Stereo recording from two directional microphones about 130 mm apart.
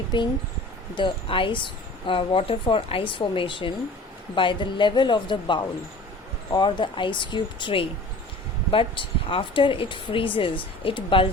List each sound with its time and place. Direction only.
0.1 s speech: 40° left (ahead or behind)